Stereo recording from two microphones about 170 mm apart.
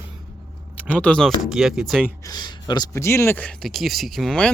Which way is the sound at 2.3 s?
25° left (ahead or behind).